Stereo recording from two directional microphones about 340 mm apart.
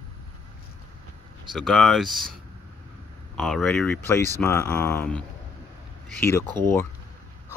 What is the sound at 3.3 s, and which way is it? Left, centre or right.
Speech, centre.